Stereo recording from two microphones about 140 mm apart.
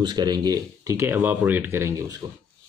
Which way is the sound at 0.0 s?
30° right (ahead or behind).